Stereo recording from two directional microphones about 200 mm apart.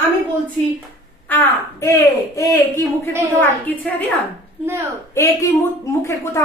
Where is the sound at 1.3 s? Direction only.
10° left (ahead or behind).